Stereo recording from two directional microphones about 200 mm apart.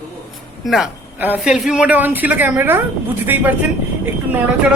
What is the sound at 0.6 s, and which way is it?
A man's voice, centre (ahead or behind).